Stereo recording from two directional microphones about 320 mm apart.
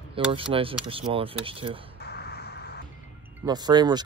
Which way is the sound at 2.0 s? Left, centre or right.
Left.